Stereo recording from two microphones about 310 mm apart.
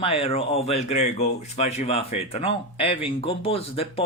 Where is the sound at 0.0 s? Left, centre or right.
Centre.